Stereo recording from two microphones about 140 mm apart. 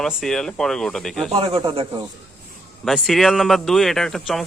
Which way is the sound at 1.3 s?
40° right (ahead or behind).